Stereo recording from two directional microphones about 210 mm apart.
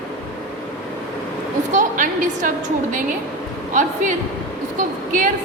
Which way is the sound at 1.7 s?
35° right (ahead or behind).